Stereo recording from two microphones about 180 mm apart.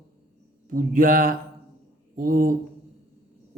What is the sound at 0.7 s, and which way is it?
A man's voice, 50° right (ahead or behind).